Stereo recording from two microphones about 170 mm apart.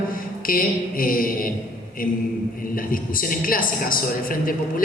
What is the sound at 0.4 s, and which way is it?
A woman's voice, 55° left (ahead or behind).